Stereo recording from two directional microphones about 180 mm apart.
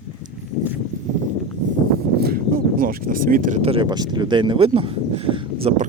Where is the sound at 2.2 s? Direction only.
55° right (ahead or behind); by 5.7 s 30° right (ahead or behind).